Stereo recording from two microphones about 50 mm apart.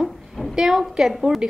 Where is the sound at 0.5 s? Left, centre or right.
Centre.